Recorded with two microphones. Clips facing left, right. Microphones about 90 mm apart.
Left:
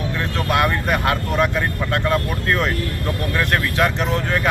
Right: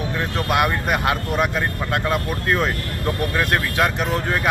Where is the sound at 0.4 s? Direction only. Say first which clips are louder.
Left 1 dB; 15° right (ahead or behind).